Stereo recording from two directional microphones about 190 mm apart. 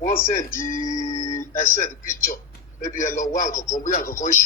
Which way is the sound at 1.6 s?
45° left (ahead or behind).